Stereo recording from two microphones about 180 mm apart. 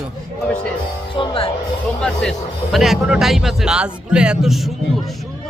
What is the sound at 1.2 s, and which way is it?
Speech, 30° left (ahead or behind).